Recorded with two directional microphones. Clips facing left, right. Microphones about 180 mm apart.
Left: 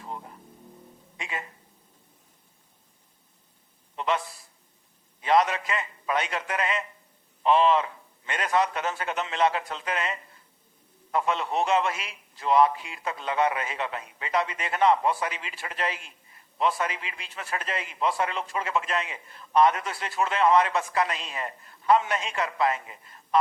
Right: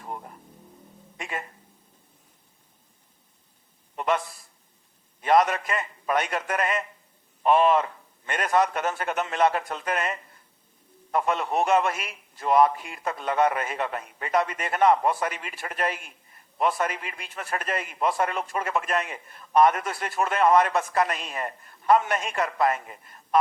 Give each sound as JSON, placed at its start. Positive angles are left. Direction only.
{"t": 1.2, "sound": "a man's voice", "side_deg": -50}
{"t": 3.9, "sound": "a sound", "side_deg": -50}
{"t": 5.2, "sound": "a man's voice", "side_deg": -50}